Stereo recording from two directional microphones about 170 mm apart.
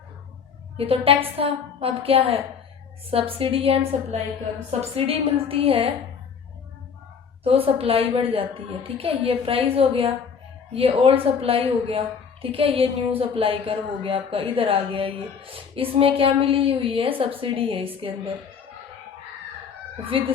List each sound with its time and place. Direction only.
0.8 s a woman's voice: 35° right (ahead or behind)
7.4 s a woman's voice: 35° right (ahead or behind)
20.1 s a woman's voice: 35° right (ahead or behind)